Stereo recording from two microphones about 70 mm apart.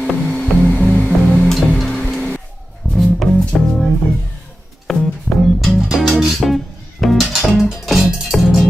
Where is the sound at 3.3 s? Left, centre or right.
Centre.